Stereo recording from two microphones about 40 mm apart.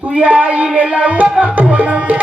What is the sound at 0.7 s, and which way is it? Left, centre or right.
Music, right.